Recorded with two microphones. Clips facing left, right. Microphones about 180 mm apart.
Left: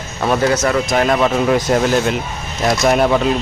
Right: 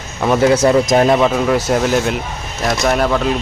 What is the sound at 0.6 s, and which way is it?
Speech, 25° right (ahead or behind).